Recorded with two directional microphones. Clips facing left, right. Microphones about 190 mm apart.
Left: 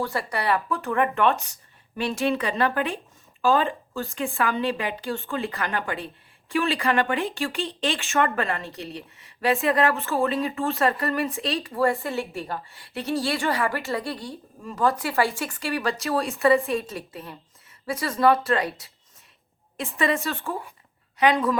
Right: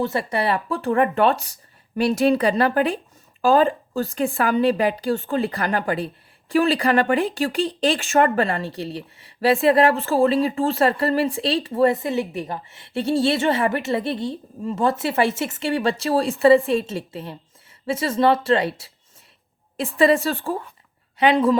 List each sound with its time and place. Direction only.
0.0 s a woman's voice: 25° right (ahead or behind)
20.0 s a woman's voice: 30° right (ahead or behind)